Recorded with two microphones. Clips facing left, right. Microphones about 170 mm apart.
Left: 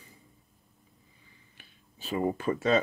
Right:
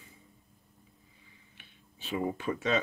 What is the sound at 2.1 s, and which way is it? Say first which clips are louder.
Speech: left 3 dB; 40° left (ahead or behind).